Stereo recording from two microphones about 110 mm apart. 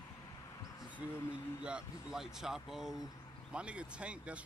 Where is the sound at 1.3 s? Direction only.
10° right (ahead or behind).